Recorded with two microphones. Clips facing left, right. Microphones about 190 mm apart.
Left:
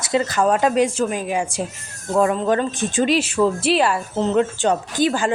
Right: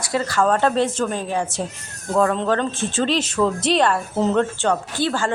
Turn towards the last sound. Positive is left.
turn(degrees=15)  # may be behind; listen again after turning